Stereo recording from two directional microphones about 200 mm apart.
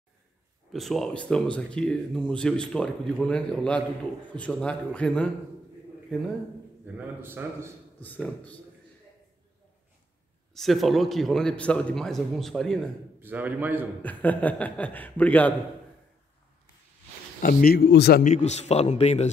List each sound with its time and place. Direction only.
0.7 s speech: centre (ahead or behind)
7.2 s a man's voice: 10° right (ahead or behind)
8.0 s a man's voice: 10° left (ahead or behind)
10.5 s speech: centre (ahead or behind)
13.2 s a man's voice: 10° right (ahead or behind)
14.0 s a man's voice: 10° left (ahead or behind)
17.4 s speech: 45° left (ahead or behind)
18.2 s a man's voice: 35° left (ahead or behind)